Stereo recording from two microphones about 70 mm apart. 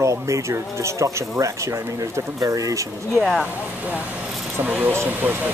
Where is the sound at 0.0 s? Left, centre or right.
Right.